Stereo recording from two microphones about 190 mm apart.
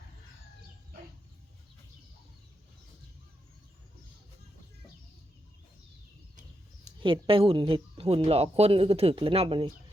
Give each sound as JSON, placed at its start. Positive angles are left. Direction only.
{"t": 7.0, "sound": "speech", "side_deg": -25}